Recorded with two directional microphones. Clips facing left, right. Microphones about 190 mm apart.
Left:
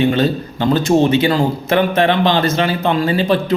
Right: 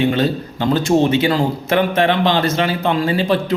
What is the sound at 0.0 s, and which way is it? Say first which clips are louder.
Speech: left 2 dB; 10° right (ahead or behind).